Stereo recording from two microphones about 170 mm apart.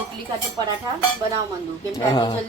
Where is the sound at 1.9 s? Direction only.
25° left (ahead or behind).